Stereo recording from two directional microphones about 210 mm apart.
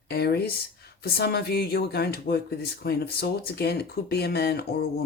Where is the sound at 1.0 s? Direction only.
50° left (ahead or behind).